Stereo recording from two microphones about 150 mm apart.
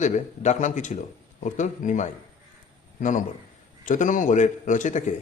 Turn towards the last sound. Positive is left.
turn(degrees=55)  # may be behind; listen again after turning